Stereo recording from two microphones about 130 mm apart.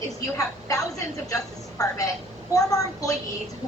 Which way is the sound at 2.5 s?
25° left (ahead or behind).